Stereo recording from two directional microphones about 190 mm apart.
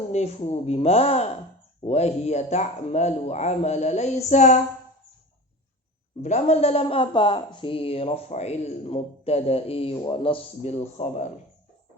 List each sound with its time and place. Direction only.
0.1 s speech: 35° left (ahead or behind)
6.2 s speech: 35° left (ahead or behind)